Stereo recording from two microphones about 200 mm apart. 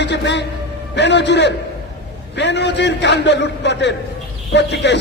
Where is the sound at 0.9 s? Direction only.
60° left (ahead or behind).